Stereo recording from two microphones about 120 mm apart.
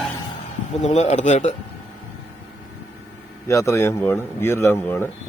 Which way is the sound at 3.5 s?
25° left (ahead or behind).